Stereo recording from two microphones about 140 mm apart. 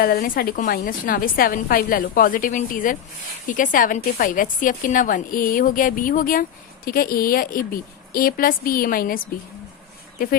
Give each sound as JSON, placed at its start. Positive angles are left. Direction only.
{"t": 0.0, "sound": "a woman's voice", "side_deg": 90}